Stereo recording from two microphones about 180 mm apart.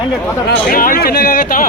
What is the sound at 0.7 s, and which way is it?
Speech, 50° left (ahead or behind).